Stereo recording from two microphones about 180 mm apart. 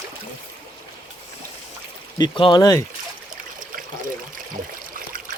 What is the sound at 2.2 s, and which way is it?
Speech, 25° left (ahead or behind).